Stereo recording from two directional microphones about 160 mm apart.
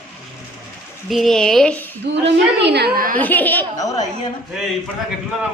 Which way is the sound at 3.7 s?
20° left (ahead or behind).